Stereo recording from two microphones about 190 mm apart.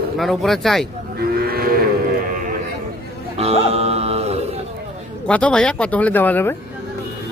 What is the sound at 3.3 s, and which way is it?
Music, 35° right (ahead or behind).